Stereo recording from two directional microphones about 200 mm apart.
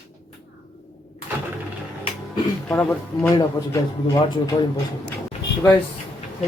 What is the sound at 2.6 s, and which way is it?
A man's voice, 10° left (ahead or behind).